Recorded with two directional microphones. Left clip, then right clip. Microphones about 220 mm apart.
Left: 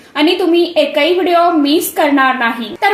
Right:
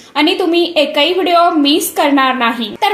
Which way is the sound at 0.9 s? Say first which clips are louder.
Right 1 dB; 25° right (ahead or behind).